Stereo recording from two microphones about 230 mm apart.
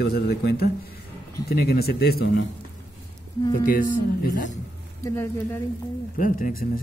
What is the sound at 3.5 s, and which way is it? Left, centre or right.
Speech, left.